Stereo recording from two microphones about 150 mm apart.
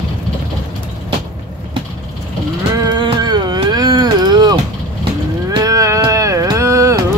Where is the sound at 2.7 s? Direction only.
30° right (ahead or behind).